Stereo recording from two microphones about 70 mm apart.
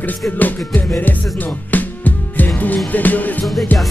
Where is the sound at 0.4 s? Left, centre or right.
Left.